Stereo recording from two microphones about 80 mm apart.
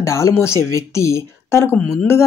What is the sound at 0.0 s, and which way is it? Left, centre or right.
Speech, left.